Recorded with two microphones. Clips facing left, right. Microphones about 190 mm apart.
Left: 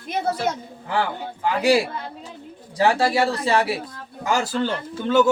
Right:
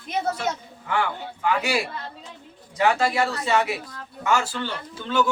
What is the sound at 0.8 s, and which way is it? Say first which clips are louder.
Speech: left 1 dB; 35° left (ahead or behind).